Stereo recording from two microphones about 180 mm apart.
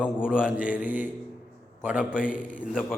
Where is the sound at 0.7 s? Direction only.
10° right (ahead or behind).